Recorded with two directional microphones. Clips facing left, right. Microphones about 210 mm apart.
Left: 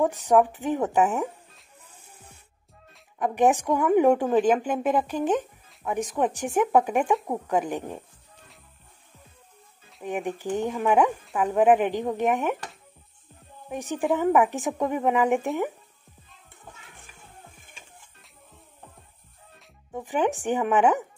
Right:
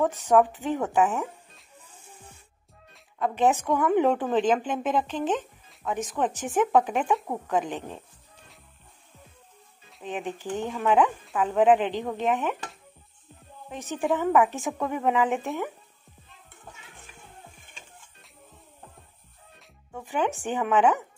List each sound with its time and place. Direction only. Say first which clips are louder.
0.3 s a woman's voice: even; 15° left (ahead or behind)
3.2 s a woman's voice: left 2 dB; 15° left (ahead or behind)
10.0 s a woman's voice: left 3 dB; 15° left (ahead or behind)
13.7 s a woman's voice: left 2 dB; 15° left (ahead or behind)
19.9 s a woman's voice: left 3 dB; 15° left (ahead or behind)